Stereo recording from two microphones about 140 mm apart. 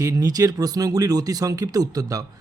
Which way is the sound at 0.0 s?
25° right (ahead or behind).